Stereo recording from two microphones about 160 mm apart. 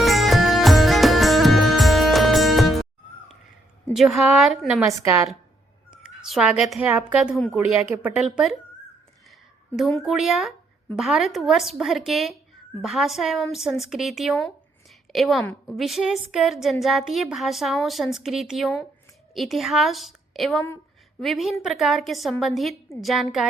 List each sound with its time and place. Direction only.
0.0 s music: centre (ahead or behind)
3.9 s a woman's voice: centre (ahead or behind)
4.8 s a woman's voice: 15° right (ahead or behind)
6.0 s a sound: 5° right (ahead or behind)
7.1 s a woman's voice: 5° right (ahead or behind)
9.7 s a woman's voice: centre (ahead or behind)